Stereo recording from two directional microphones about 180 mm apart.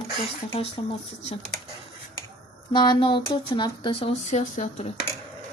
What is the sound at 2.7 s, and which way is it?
Speech, 25° left (ahead or behind).